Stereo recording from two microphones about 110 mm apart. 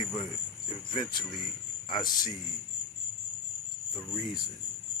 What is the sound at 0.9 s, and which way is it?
Speech, 45° left (ahead or behind).